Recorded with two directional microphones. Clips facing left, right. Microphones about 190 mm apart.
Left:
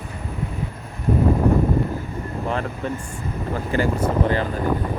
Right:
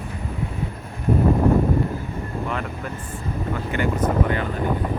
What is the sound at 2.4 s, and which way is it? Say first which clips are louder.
Speech: left 3 dB; 35° left (ahead or behind).